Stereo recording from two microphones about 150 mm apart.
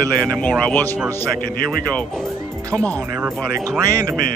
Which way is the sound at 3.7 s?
25° right (ahead or behind).